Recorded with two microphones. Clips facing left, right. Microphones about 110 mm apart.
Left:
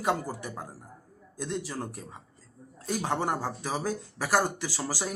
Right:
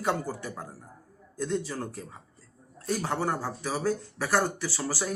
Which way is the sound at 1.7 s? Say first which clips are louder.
Right 1 dB; 15° left (ahead or behind).